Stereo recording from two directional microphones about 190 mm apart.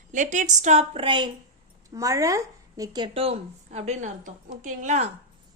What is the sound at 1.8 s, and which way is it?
A woman's voice, 15° right (ahead or behind).